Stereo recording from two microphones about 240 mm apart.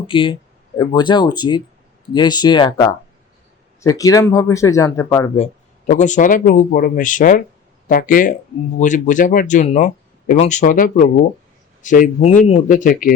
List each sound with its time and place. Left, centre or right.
0.1 s speech: left
5.9 s speech: left